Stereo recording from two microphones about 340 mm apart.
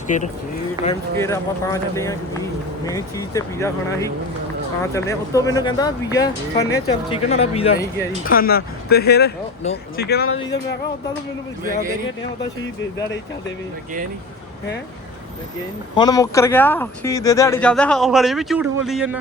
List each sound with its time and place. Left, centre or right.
0.1 s speech: left
1.2 s speech: centre; by 10.3 s left
16.0 s speech: centre